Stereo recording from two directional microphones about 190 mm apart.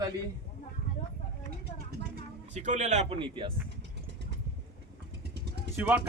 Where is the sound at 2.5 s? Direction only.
40° right (ahead or behind).